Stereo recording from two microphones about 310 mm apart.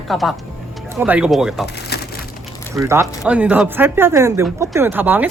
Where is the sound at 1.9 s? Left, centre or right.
Left.